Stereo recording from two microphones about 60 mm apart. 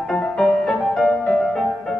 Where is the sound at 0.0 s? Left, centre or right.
Centre.